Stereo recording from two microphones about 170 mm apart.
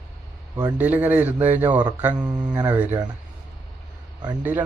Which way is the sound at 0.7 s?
10° right (ahead or behind).